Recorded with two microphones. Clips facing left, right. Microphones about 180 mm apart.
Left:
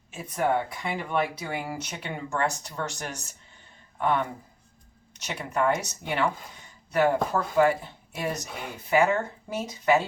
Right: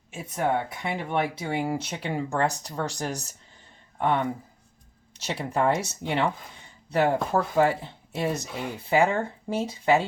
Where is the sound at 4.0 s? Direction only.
25° right (ahead or behind).